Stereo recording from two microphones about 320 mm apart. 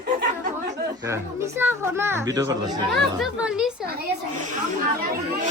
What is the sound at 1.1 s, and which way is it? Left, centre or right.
Speech, centre.